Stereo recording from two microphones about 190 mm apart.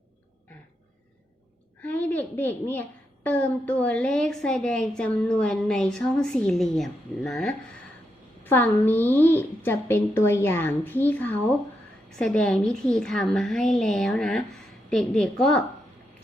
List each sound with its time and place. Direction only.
1.8 s a woman's voice: 10° left (ahead or behind)